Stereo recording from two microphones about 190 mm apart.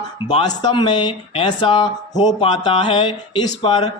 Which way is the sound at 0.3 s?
25° left (ahead or behind).